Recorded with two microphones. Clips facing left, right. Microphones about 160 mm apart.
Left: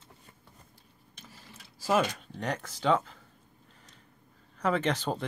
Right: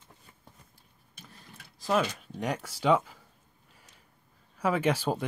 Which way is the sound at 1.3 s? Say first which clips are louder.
Even; centre (ahead or behind).